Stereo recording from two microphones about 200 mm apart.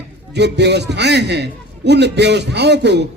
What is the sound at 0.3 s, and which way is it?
A man's voice, 60° right (ahead or behind).